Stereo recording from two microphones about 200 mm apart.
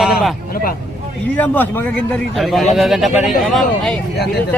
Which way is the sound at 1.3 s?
10° left (ahead or behind).